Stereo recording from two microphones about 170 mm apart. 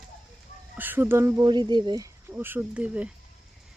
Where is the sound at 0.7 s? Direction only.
10° right (ahead or behind).